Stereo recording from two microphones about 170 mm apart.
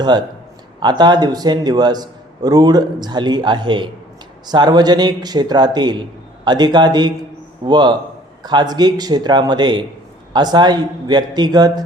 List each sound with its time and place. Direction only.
0.0 s a man's voice: 25° right (ahead or behind)